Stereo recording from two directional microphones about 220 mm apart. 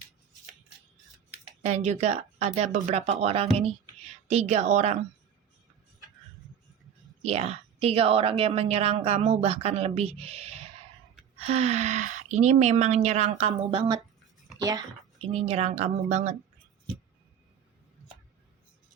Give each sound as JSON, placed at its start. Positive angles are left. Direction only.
{"t": 1.6, "sound": "a woman's voice", "side_deg": -30}
{"t": 7.2, "sound": "a woman's voice", "side_deg": -30}